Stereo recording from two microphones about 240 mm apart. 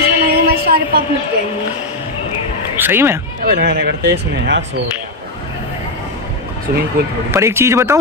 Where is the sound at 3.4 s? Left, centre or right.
Right.